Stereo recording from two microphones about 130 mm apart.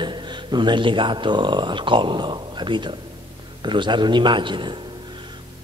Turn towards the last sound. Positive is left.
turn(degrees=-35)  # may be behind; listen again after turning